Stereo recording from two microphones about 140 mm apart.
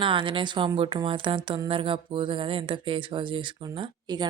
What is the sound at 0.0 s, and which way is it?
A woman's voice, 35° right (ahead or behind).